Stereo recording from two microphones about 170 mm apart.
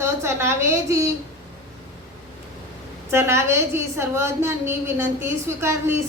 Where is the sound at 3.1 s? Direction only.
15° right (ahead or behind).